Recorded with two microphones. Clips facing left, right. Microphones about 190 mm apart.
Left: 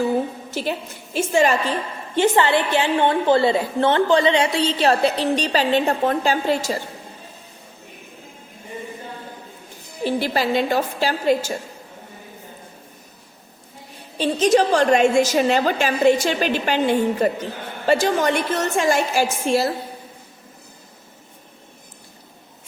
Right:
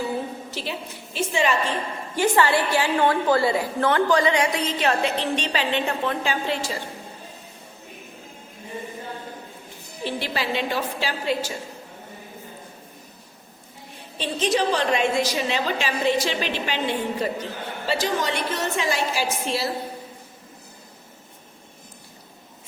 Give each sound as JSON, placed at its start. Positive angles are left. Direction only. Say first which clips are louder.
{"t": 0.5, "sound": "a woman's voice", "louder": "left 6 dB", "side_deg": 50}
{"t": 2.1, "sound": "a woman's voice", "louder": "left 3 dB", "side_deg": 20}
{"t": 10.0, "sound": "a woman's voice", "louder": "left 6 dB", "side_deg": 45}
{"t": 14.2, "sound": "a woman's voice", "louder": "left 7 dB", "side_deg": 40}